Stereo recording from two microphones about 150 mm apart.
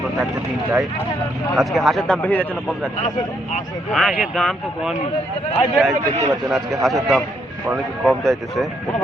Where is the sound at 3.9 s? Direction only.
Centre (ahead or behind).